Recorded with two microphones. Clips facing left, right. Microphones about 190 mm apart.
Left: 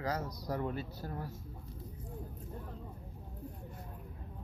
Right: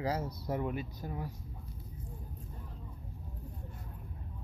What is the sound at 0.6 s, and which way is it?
Speech, 15° right (ahead or behind).